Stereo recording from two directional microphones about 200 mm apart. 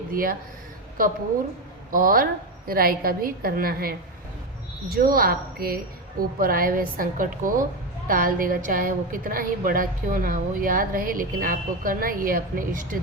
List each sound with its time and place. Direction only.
0.1 s a woman's voice: 45° right (ahead or behind)
1.9 s a woman's voice: 45° right (ahead or behind)